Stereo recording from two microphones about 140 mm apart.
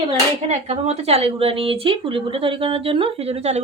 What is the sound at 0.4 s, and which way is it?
A woman's voice, 50° right (ahead or behind).